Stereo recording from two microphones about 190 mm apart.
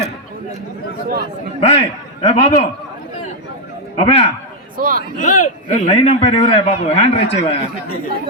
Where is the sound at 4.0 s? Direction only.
30° left (ahead or behind).